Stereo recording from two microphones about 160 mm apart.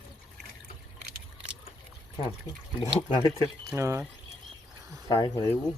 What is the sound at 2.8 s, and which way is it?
Speech, 20° left (ahead or behind).